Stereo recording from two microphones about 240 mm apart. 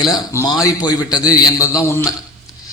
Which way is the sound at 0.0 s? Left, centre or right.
Centre.